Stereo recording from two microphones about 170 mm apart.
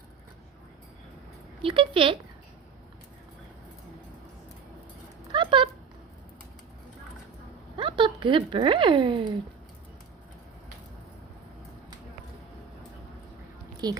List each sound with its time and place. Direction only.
1.6 s speech: 30° right (ahead or behind)
5.3 s a sound: 30° right (ahead or behind)
7.8 s speech: 30° right (ahead or behind)
13.8 s a woman's voice: 25° right (ahead or behind)